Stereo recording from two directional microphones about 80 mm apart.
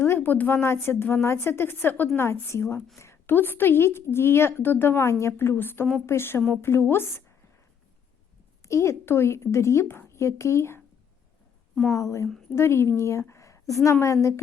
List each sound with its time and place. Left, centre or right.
0.0 s a woman's voice: left
8.6 s a woman's voice: left
11.7 s a woman's voice: centre
11.9 s a woman's voice: left